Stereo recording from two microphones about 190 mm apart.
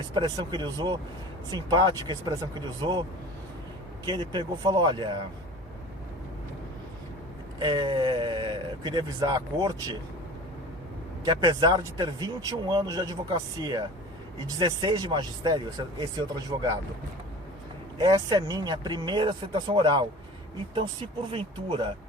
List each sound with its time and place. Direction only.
0.1 s speech: 25° right (ahead or behind)
4.0 s speech: 25° right (ahead or behind)
7.6 s speech: 25° right (ahead or behind)
11.3 s speech: 25° right (ahead or behind)
17.9 s speech: 25° right (ahead or behind)
21.3 s speech: 25° right (ahead or behind)